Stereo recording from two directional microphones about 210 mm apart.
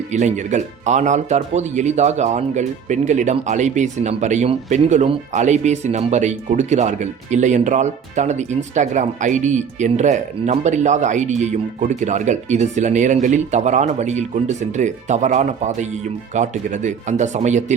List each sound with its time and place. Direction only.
0.1 s speech: 35° right (ahead or behind)